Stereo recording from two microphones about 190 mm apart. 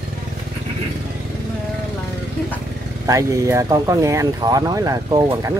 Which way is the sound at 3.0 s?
15° right (ahead or behind).